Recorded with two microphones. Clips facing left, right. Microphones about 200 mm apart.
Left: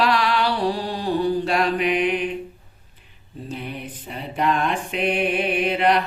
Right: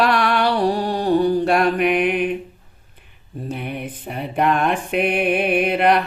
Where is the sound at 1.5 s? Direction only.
55° right (ahead or behind).